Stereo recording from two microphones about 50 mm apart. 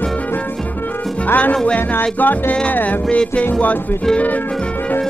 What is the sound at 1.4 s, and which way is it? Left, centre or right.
Speech, left.